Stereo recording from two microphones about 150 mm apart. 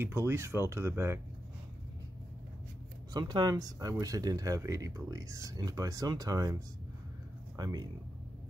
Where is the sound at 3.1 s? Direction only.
30° right (ahead or behind).